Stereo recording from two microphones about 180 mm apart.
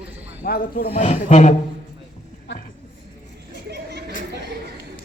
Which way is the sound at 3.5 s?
70° right (ahead or behind).